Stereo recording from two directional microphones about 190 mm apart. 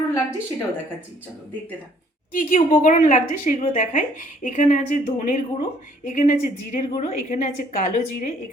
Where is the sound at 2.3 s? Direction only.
45° left (ahead or behind).